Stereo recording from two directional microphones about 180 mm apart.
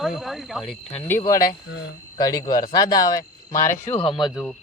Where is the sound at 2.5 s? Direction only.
50° left (ahead or behind).